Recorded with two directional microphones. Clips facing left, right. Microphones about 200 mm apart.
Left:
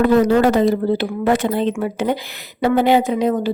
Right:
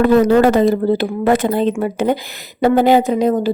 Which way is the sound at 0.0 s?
50° right (ahead or behind).